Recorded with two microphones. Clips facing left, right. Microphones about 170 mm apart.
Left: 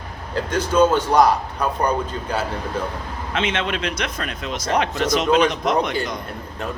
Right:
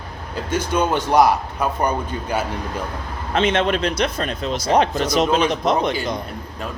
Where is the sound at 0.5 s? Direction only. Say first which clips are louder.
Left 3 dB; 10° right (ahead or behind).